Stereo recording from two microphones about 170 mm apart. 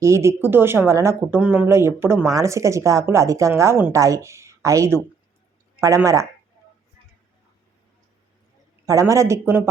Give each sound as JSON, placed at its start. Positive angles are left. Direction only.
{"t": 0.0, "sound": "speech", "side_deg": -15}
{"t": 8.9, "sound": "speech", "side_deg": -20}